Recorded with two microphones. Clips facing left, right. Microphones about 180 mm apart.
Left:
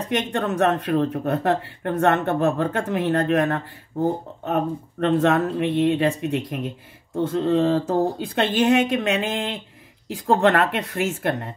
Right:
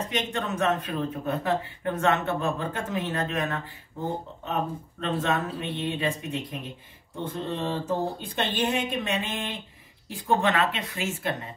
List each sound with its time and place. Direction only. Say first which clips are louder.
0.1 s speech: left 6 dB; 60° left (ahead or behind)
7.2 s speech: left 11 dB; 80° left; by 11.5 s 60° left (ahead or behind)